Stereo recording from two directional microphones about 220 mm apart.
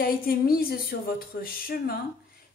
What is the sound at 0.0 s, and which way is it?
Speech, 40° left (ahead or behind).